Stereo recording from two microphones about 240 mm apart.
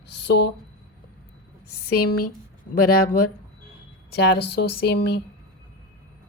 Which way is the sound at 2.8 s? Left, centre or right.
Left.